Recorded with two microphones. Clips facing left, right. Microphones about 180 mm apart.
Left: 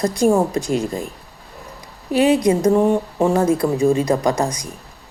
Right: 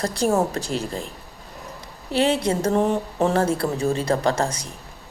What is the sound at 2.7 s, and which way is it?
Speech, centre (ahead or behind).